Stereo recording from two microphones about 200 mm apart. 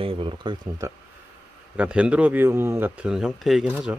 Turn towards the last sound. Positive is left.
turn(degrees=-5)  # may be behind; listen again after turning